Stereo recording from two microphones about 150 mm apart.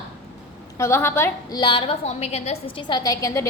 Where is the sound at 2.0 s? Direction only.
45° left (ahead or behind).